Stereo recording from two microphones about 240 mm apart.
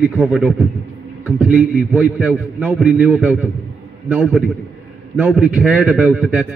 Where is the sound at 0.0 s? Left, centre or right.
Centre.